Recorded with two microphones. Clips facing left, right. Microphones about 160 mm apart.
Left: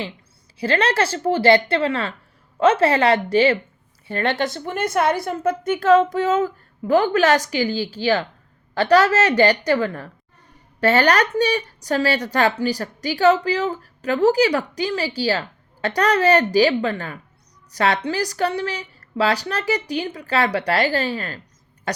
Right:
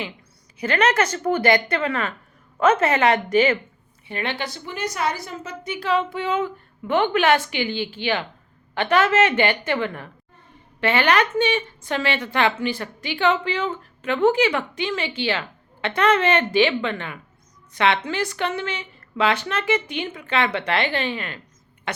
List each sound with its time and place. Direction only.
0.6 s a woman's voice: 30° left (ahead or behind)
4.3 s a woman's voice: 45° left (ahead or behind)